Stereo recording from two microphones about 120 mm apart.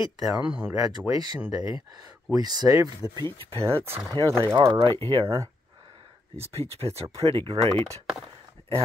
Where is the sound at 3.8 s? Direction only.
20° right (ahead or behind).